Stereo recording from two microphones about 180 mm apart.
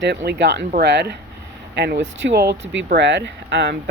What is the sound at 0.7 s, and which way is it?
Speech, 65° right (ahead or behind).